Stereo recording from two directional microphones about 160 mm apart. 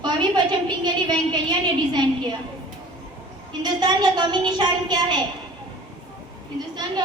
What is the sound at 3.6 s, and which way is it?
A woman's voice, 25° right (ahead or behind).